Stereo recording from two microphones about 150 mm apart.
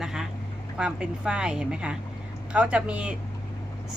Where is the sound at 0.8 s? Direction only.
5° right (ahead or behind).